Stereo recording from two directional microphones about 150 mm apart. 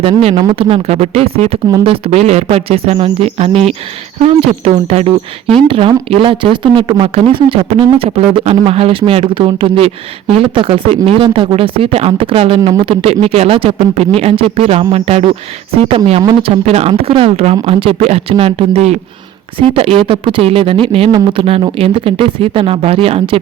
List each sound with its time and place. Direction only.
0.0 s speech: 40° right (ahead or behind)